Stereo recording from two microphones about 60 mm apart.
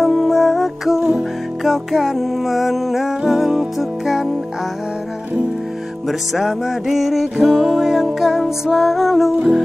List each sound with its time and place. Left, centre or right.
0.0 s music: centre
6.0 s music: centre